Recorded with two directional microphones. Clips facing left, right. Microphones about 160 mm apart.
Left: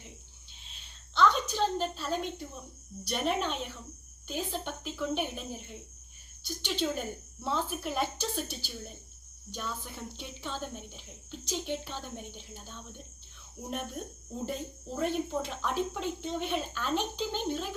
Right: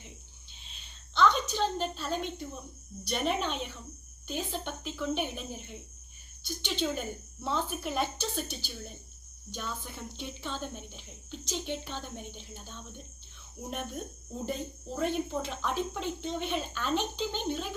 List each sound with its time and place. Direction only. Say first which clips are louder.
1.1 s a woman's voice: even; 5° left (ahead or behind)